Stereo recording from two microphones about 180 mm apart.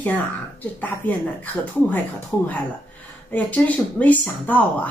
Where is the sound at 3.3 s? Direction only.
10° left (ahead or behind).